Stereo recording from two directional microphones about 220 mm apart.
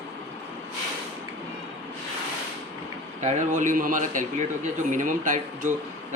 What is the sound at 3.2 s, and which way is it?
Speech, 35° right (ahead or behind).